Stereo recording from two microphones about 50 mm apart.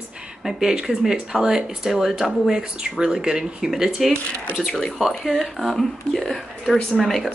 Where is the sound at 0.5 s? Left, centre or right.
Centre.